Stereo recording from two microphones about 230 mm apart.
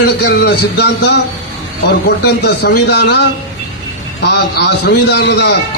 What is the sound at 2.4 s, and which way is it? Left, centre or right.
A man's voice, left.